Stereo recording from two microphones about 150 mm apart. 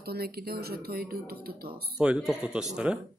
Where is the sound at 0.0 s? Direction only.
90° right.